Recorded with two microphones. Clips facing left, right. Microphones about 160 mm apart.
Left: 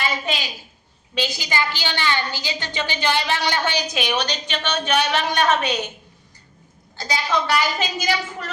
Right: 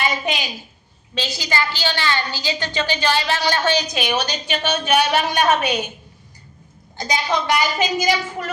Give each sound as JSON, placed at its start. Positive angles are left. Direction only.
{"t": 0.0, "sound": "a woman's voice", "side_deg": -15}
{"t": 1.1, "sound": "a woman's voice", "side_deg": 15}
{"t": 3.9, "sound": "a woman's voice", "side_deg": -5}
{"t": 6.9, "sound": "a woman's voice", "side_deg": -15}